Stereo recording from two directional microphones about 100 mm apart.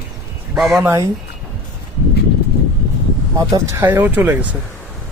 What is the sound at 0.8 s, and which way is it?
Speech, 30° right (ahead or behind).